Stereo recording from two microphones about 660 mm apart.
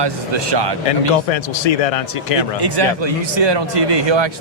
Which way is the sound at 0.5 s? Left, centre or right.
Right.